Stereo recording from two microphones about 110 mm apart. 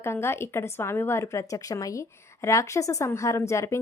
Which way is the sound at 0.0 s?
25° left (ahead or behind).